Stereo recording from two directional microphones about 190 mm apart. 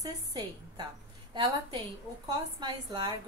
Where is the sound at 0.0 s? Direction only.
20° right (ahead or behind).